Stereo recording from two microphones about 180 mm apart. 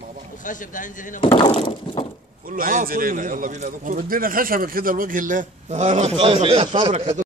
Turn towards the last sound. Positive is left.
turn(degrees=-30)  # may be behind; listen again after turning